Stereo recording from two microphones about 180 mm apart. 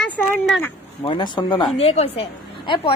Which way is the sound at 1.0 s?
25° left (ahead or behind).